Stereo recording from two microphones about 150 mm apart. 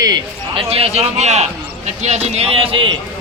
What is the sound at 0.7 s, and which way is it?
A man's voice, 45° right (ahead or behind).